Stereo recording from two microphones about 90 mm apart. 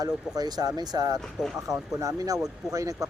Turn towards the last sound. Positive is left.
turn(degrees=-40)  # may be behind; listen again after turning